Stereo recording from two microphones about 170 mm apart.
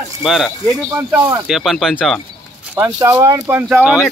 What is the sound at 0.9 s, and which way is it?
Speech, 15° right (ahead or behind).